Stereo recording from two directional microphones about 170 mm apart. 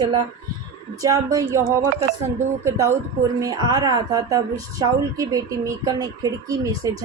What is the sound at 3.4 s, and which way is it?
A man's voice, 20° right (ahead or behind).